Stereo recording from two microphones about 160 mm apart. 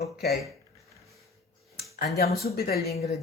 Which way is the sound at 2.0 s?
75° left (ahead or behind).